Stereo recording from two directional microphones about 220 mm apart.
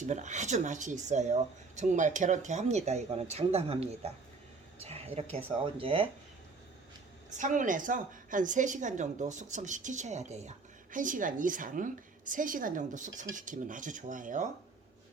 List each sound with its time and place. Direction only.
0.0 s speech: 35° right (ahead or behind)
4.8 s a sound: 25° right (ahead or behind)
5.8 s speech: 25° right (ahead or behind)
7.3 s speech: 35° right (ahead or behind)